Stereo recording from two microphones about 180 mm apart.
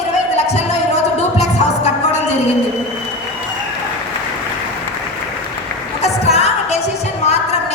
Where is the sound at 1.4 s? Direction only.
40° left (ahead or behind).